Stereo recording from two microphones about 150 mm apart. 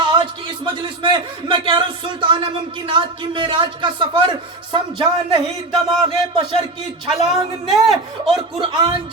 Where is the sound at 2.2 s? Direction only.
30° right (ahead or behind).